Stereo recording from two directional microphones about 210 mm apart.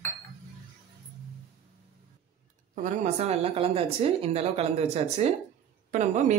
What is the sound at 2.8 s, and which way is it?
A woman's voice, 35° right (ahead or behind).